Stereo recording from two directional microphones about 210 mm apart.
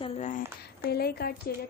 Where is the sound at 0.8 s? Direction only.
50° left (ahead or behind).